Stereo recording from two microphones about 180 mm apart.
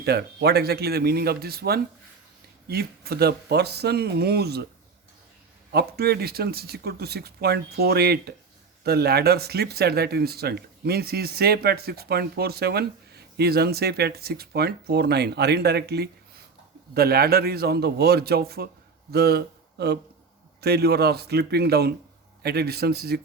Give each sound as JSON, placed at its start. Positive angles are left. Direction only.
{"t": 0.0, "sound": "speech", "side_deg": -65}
{"t": 5.7, "sound": "speech", "side_deg": -60}